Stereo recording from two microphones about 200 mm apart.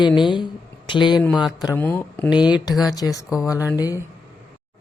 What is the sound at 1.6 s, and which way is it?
Speech, 10° left (ahead or behind).